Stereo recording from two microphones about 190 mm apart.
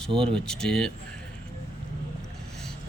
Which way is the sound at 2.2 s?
Centre (ahead or behind).